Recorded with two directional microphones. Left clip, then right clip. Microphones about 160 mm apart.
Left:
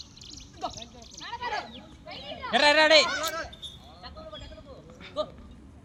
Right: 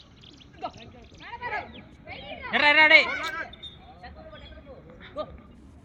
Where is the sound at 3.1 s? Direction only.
90° left.